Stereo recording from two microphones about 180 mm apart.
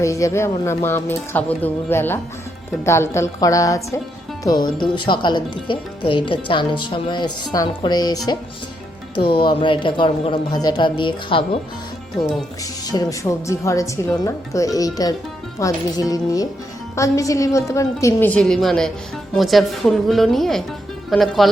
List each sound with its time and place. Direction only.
0.0 s a woman's voice: 15° left (ahead or behind)
12.1 s a woman's voice: 5° left (ahead or behind)
12.9 s a woman's voice: 20° left (ahead or behind); by 21.5 s centre (ahead or behind)